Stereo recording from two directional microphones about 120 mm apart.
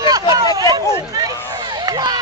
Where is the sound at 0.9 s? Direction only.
35° right (ahead or behind).